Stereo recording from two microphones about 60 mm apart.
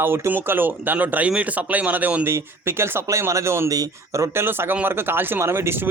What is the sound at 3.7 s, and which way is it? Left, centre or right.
Speech, right.